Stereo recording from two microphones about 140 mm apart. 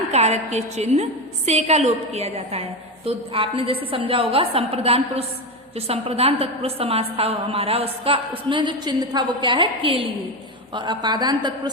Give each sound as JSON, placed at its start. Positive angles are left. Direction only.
{"t": 0.1, "sound": "a woman's voice", "side_deg": -50}